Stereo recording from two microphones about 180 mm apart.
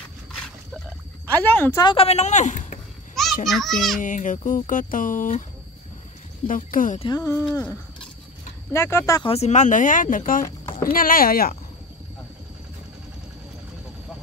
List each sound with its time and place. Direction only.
1.3 s a woman's voice: 10° left (ahead or behind); by 2.8 s 45° left (ahead or behind)
3.4 s a child's voice: centre (ahead or behind)
4.0 s speech: 45° left (ahead or behind)
6.4 s speech: 50° left (ahead or behind)
7.0 s speech: 20° left (ahead or behind)
7.5 s a sound: 5° left (ahead or behind)
8.7 s speech: 15° left (ahead or behind)
9.3 s speech: 40° left (ahead or behind); by 11.5 s 55° left (ahead or behind)